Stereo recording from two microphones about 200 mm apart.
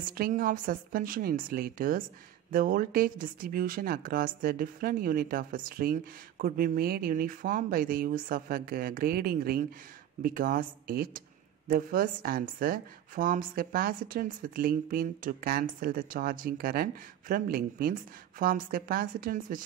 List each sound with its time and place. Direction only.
0.0 s speech: 45° right (ahead or behind)